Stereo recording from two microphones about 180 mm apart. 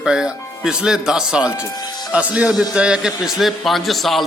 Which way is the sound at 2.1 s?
5° right (ahead or behind).